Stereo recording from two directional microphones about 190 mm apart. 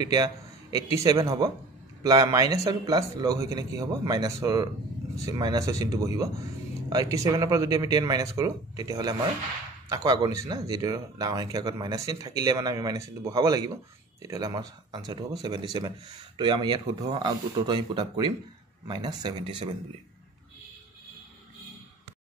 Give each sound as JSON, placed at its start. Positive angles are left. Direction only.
{"t": 0.1, "sound": "a man's voice", "side_deg": -20}